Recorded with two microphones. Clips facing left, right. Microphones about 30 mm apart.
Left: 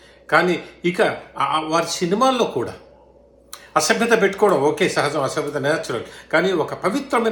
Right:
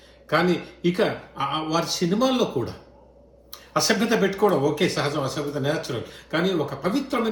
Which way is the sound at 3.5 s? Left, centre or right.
Left.